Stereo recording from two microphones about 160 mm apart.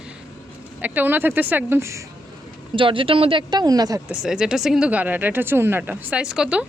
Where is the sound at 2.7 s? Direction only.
30° right (ahead or behind).